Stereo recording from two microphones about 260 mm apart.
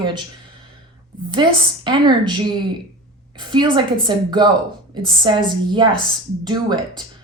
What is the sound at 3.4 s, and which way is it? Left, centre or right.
Speech, centre.